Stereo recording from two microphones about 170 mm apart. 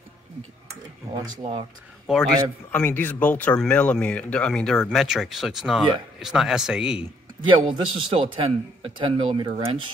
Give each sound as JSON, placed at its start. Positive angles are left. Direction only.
{"t": 1.4, "sound": "a man's voice", "side_deg": -35}
{"t": 2.0, "sound": "speech", "side_deg": 0}
{"t": 2.7, "sound": "speech", "side_deg": 10}
{"t": 7.4, "sound": "a man's voice", "side_deg": -30}